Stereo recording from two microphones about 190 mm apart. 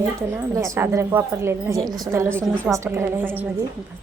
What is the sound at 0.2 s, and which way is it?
A woman's voice, 15° right (ahead or behind).